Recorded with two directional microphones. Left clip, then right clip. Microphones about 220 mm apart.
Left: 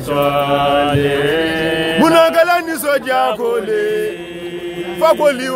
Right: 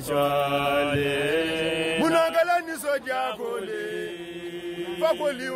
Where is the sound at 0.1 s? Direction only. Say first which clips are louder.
Left 9 dB; 20° right (ahead or behind).